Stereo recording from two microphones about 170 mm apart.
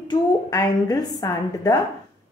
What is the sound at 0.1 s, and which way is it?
A woman's voice, 20° left (ahead or behind).